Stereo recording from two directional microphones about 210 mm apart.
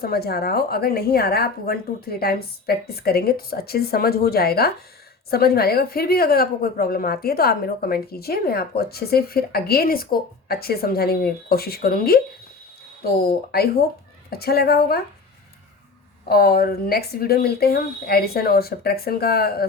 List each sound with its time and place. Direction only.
0.0 s a woman's voice: 50° left (ahead or behind)
16.3 s a woman's voice: 45° left (ahead or behind)